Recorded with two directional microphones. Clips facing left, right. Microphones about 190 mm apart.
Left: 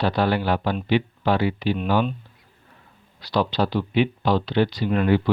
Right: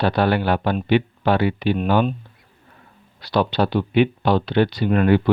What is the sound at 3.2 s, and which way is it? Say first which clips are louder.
Speech: right 3 dB; 60° right (ahead or behind).